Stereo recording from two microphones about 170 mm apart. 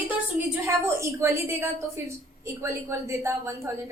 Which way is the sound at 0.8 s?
15° right (ahead or behind).